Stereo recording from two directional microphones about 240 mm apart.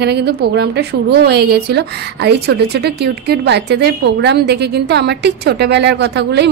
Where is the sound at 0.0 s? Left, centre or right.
Right.